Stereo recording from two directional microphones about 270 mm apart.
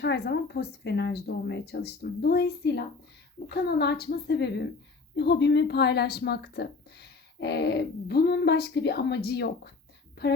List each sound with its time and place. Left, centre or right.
0.0 s speech: left